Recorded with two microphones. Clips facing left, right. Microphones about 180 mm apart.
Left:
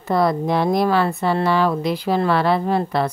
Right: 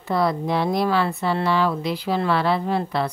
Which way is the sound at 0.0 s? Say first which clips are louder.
Left 3 dB; 45° left (ahead or behind).